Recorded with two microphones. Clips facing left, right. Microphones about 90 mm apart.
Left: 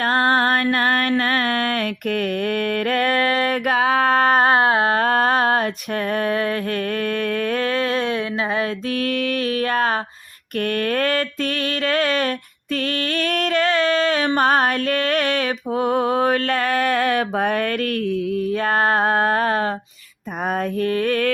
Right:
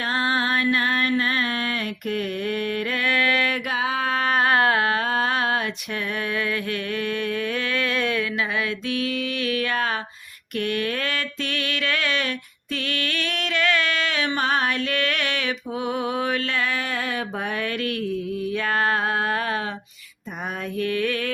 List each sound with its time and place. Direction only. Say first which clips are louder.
0.0 s music: left 6 dB; 50° left (ahead or behind)
3.7 s music: left 7 dB; 55° left (ahead or behind); by 4.9 s 25° left (ahead or behind)
4.9 s a sound: left 6 dB; 45° left (ahead or behind)
6.1 s music: left 6 dB; 40° left (ahead or behind)
9.0 s a sound: left 7 dB; 55° left (ahead or behind)
9.4 s mantra: left 2 dB; 40° left (ahead or behind)
12.7 s music: left 5 dB; 40° left (ahead or behind)
20.7 s music: left 2 dB; 40° left (ahead or behind)